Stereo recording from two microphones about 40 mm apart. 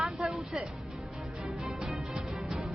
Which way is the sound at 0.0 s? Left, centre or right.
Centre.